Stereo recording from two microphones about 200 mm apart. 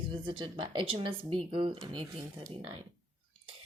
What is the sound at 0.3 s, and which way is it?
Speech, 25° right (ahead or behind).